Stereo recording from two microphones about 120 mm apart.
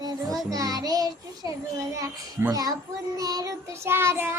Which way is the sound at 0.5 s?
30° right (ahead or behind).